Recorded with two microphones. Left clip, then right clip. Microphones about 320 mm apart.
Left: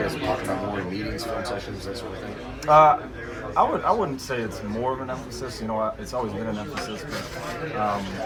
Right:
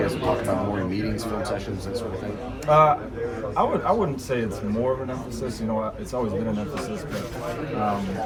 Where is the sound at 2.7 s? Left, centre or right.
Centre.